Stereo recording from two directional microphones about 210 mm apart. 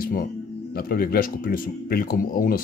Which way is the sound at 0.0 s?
45° left (ahead or behind).